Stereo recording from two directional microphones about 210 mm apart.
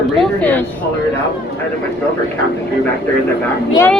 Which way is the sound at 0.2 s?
5° left (ahead or behind).